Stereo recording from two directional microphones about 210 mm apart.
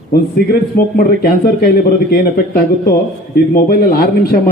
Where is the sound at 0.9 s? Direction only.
45° left (ahead or behind).